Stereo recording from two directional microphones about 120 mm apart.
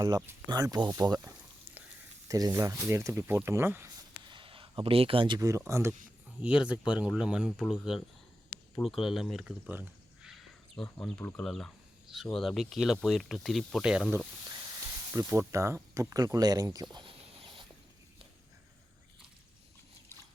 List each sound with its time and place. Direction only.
0.4 s speech: 35° right (ahead or behind)
4.3 s a sound: 45° right (ahead or behind)
5.4 s speech: 25° right (ahead or behind)
6.4 s speech: 10° right (ahead or behind)
9.6 s speech: 15° right (ahead or behind)
10.2 s wild animals: centre (ahead or behind)
10.8 s speech: 15° left (ahead or behind)
11.3 s speech: 5° left (ahead or behind)
15.3 s speech: 25° right (ahead or behind)
16.9 s a sound: 45° right (ahead or behind)